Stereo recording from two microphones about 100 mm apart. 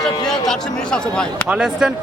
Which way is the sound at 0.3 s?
5° left (ahead or behind).